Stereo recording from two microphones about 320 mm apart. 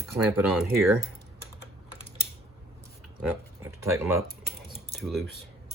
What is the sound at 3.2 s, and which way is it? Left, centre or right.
Typing, centre.